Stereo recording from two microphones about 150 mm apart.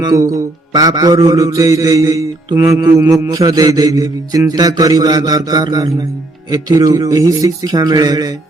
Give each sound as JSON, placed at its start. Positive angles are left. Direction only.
{"t": 0.0, "sound": "music", "side_deg": -25}